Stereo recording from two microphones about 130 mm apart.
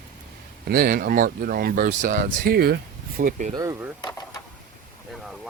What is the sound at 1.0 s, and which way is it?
Speech, 90° right.